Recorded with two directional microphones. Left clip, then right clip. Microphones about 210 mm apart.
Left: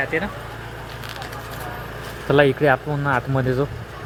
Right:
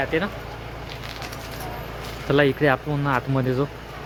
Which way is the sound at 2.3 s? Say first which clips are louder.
Left 3 dB; 5° left (ahead or behind).